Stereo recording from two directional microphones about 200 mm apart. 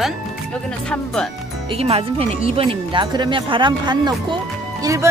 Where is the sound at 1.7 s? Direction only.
30° right (ahead or behind).